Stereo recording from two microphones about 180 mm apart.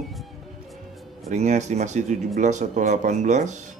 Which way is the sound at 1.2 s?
40° right (ahead or behind).